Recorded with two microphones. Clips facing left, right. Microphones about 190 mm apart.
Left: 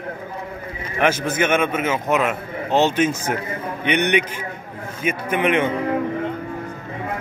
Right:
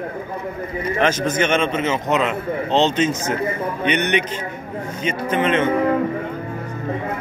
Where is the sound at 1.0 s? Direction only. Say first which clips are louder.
Even; 10° left (ahead or behind).